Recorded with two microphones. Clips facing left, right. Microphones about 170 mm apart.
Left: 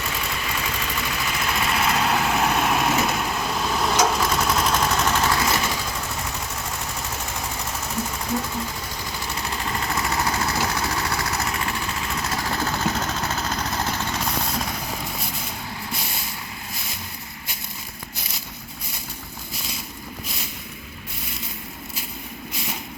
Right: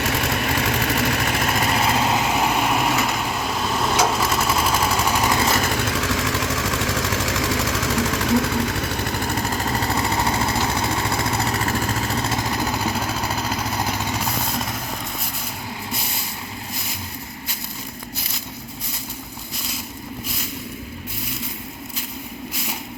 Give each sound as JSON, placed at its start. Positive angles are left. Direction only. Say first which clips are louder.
{"t": 0.0, "sound": "vehicle", "louder": "right 7 dB", "side_deg": -75}
{"t": 1.4, "sound": "vehicle", "louder": "right 3 dB", "side_deg": -45}
{"t": 1.9, "sound": "vehicle", "louder": "right 2 dB", "side_deg": -20}
{"t": 5.7, "sound": "vehicle", "louder": "right 7 dB", "side_deg": -75}